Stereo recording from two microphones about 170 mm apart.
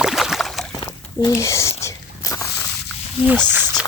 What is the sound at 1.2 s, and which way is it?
Speech, 20° left (ahead or behind).